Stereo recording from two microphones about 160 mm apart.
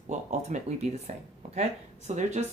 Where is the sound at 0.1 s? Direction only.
45° right (ahead or behind).